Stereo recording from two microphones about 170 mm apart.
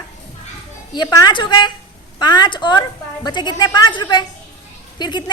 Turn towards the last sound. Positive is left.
turn(degrees=25)  # may be behind; listen again after turning